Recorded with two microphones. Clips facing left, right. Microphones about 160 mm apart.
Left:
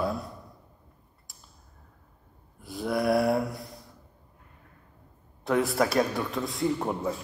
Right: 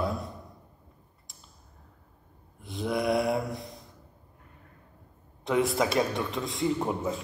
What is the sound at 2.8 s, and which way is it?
Speech, centre (ahead or behind).